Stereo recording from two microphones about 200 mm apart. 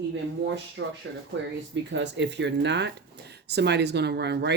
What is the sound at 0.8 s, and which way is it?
Speech, 60° right (ahead or behind).